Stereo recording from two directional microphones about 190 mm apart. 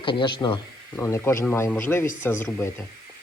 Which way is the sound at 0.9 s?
15° left (ahead or behind).